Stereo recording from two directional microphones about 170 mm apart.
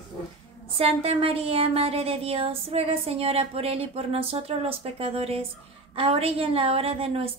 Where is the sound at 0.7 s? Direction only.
35° right (ahead or behind).